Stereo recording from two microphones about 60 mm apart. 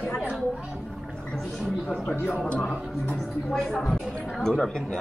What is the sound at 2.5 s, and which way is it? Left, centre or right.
Speech, centre.